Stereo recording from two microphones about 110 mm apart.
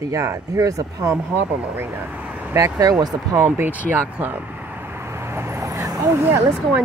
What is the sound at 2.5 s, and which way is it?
Speech, 25° right (ahead or behind).